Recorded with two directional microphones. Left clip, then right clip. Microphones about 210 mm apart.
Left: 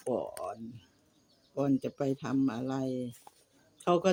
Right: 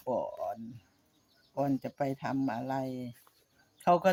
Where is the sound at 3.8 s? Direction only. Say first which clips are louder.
Right 2 dB; 5° right (ahead or behind).